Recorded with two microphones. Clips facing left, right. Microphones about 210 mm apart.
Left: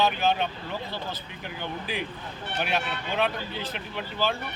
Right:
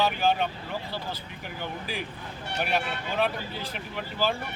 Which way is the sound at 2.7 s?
5° right (ahead or behind).